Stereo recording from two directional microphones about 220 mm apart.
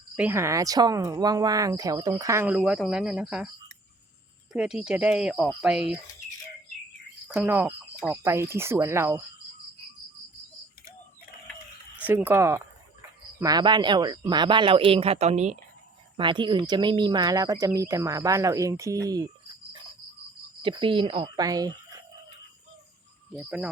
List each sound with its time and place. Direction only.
0.2 s speech: 10° right (ahead or behind)
4.5 s speech: 5° right (ahead or behind)
7.3 s speech: 10° right (ahead or behind)
12.0 s speech: 10° right (ahead or behind)
20.6 s speech: 20° right (ahead or behind)
23.3 s speech: 5° right (ahead or behind)